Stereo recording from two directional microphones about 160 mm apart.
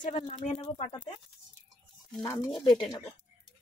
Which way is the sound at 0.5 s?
40° left (ahead or behind).